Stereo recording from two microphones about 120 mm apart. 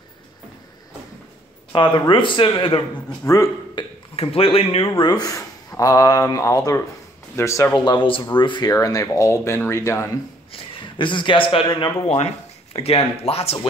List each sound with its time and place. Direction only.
1.7 s speech: 40° left (ahead or behind)
3.3 s speech: 30° left (ahead or behind)
4.2 s speech: 55° left (ahead or behind)
5.0 s speech: 30° left (ahead or behind)
7.8 s speech: 40° left (ahead or behind)
8.7 s speech: 30° left (ahead or behind)
10.5 s speech: 40° left (ahead or behind)
12.7 s speech: 55° left (ahead or behind)